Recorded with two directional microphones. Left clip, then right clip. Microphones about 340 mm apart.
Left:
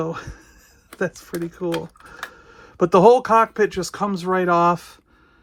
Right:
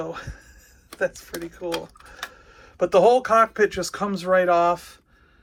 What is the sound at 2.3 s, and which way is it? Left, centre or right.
Speech, centre.